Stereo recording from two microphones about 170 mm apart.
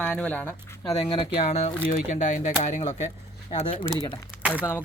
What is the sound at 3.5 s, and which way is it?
Speech, 35° left (ahead or behind).